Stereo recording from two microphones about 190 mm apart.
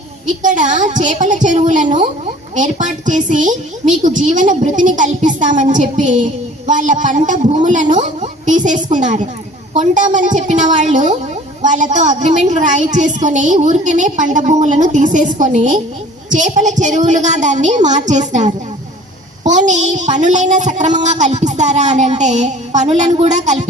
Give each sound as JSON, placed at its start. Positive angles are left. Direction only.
{"t": 0.4, "sound": "a woman's voice", "side_deg": -40}